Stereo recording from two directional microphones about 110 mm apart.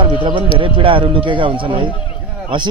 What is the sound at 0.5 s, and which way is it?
A man's voice, 55° right (ahead or behind).